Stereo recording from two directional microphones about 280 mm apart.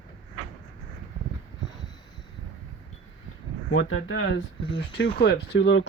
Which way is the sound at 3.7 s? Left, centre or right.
Left.